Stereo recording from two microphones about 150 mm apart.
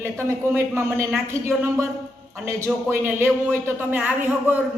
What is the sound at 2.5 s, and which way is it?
A woman's voice, 15° right (ahead or behind).